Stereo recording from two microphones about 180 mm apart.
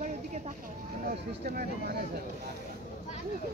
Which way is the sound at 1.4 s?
55° right (ahead or behind).